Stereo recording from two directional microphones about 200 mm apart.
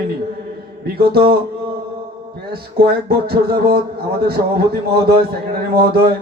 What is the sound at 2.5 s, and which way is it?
Speech, 50° right (ahead or behind).